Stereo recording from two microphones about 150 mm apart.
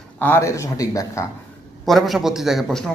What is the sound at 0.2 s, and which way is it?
Speech, 15° left (ahead or behind).